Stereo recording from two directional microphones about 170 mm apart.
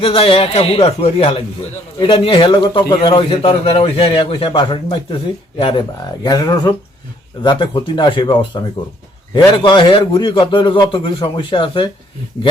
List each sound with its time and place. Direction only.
0.0 s a man's voice: 35° left (ahead or behind)